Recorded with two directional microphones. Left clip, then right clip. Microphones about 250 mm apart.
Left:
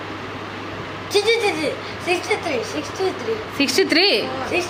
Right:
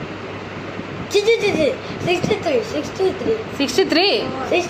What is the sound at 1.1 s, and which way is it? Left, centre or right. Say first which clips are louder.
Speech: right 2 dB; centre.